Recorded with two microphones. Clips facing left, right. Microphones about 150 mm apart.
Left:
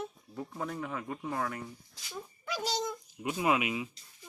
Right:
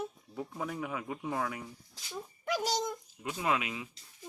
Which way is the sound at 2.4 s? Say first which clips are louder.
Right 4 dB; 50° right (ahead or behind).